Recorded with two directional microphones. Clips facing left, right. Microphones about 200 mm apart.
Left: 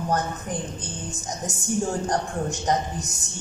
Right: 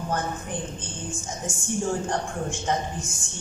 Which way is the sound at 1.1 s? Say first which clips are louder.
Left 1 dB; 40° left (ahead or behind).